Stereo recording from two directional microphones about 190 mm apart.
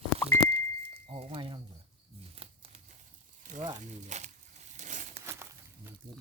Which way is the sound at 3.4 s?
40° right (ahead or behind).